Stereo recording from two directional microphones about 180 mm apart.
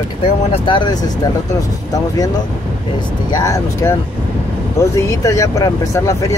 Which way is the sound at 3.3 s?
20° left (ahead or behind).